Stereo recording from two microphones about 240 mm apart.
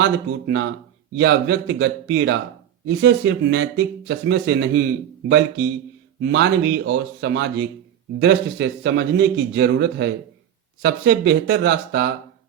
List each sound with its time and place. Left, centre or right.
0.0 s speech: right
6.2 s speech: right